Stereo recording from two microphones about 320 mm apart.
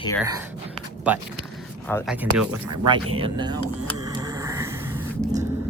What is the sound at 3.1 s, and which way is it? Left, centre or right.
Speech, centre.